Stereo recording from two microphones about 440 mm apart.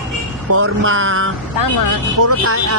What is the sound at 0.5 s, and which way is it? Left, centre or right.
Speech, right.